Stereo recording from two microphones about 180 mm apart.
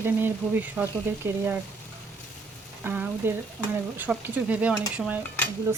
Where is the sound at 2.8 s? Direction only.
10° right (ahead or behind).